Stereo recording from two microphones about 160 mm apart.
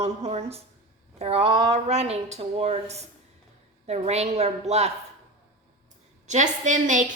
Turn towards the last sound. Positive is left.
turn(degrees=-50)  # may be behind; listen again after turning